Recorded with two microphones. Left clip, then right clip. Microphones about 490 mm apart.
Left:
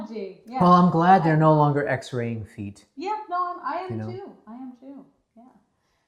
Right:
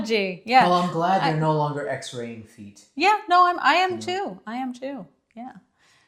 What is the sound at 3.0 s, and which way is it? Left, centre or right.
Speech, right.